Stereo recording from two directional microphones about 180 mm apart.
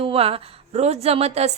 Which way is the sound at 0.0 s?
30° right (ahead or behind).